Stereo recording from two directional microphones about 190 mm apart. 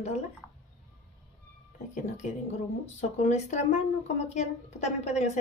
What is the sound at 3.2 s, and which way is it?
A woman's voice, 35° left (ahead or behind).